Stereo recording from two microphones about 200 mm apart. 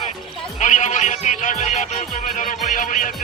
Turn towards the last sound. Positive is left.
turn(degrees=40)  # may be behind; listen again after turning